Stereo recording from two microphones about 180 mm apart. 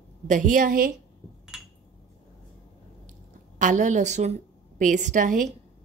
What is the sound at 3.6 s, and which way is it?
A woman's voice, 45° right (ahead or behind).